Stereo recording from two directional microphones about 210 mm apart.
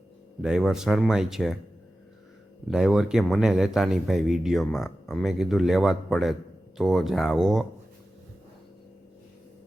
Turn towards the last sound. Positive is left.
turn(degrees=0)  # may be behind; listen again after turning